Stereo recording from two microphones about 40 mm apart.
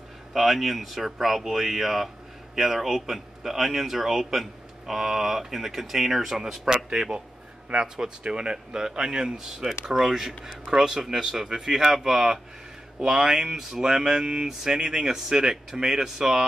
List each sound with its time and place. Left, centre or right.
0.3 s speech: centre